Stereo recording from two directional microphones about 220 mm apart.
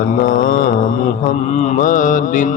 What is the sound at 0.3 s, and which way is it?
Mantra, 40° left (ahead or behind).